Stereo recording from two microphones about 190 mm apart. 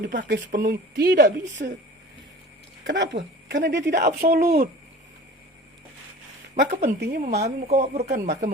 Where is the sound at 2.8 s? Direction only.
70° right (ahead or behind); by 4.7 s 50° right (ahead or behind).